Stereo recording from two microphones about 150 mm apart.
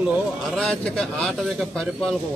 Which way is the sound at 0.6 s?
5° left (ahead or behind).